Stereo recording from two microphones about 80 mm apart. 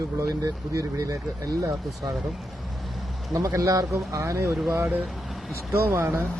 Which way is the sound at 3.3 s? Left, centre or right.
Right.